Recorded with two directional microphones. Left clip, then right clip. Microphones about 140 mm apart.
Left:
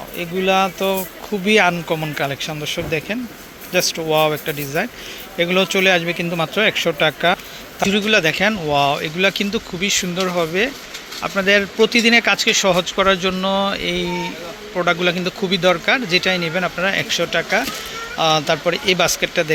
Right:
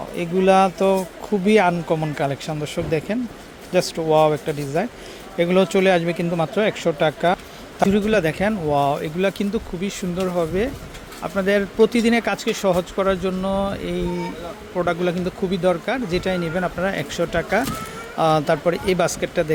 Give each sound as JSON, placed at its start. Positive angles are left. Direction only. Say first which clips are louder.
{"t": 0.2, "sound": "speech", "louder": "right 1 dB", "side_deg": -40}
{"t": 1.5, "sound": "speech", "louder": "left 2 dB", "side_deg": -25}
{"t": 6.3, "sound": "speech", "louder": "left 4 dB", "side_deg": -20}
{"t": 7.8, "sound": "speech", "louder": "left 2 dB", "side_deg": -35}
{"t": 17.2, "sound": "a man's voice", "louder": "left 2 dB", "side_deg": -35}